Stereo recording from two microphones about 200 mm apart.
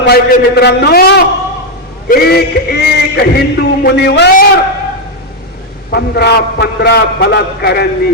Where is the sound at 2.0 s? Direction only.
50° left (ahead or behind).